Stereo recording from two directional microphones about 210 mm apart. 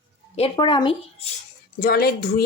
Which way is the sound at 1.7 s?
45° left (ahead or behind).